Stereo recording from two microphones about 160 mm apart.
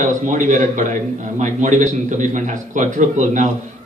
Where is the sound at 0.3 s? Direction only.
55° right (ahead or behind).